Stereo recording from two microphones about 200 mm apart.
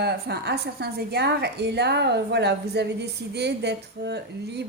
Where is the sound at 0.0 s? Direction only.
55° right (ahead or behind).